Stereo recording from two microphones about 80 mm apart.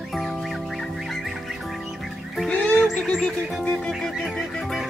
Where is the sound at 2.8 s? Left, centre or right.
Centre.